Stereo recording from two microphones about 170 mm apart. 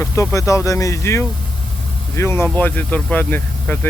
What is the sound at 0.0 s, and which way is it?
Speech, 15° left (ahead or behind).